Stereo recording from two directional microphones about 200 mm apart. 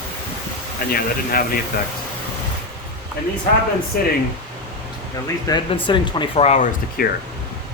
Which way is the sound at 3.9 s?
45° left (ahead or behind).